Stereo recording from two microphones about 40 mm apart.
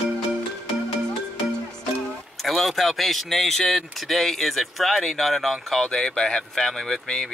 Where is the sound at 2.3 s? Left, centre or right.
Centre.